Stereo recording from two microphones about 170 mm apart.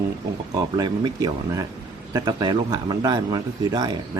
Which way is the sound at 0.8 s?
25° right (ahead or behind).